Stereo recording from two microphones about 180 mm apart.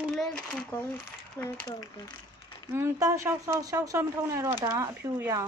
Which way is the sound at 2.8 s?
15° right (ahead or behind).